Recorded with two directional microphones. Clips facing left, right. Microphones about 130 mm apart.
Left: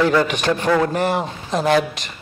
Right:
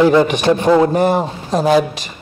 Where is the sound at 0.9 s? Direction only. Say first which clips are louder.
Right 6 dB; 40° right (ahead or behind).